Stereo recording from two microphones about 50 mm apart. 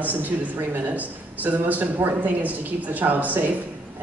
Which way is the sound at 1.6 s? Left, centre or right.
Right.